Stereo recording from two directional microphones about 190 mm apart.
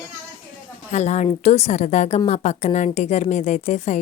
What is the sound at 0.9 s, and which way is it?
A woman's voice, 35° left (ahead or behind).